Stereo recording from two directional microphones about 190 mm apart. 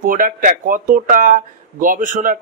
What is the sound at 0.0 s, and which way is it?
Speech, 45° right (ahead or behind).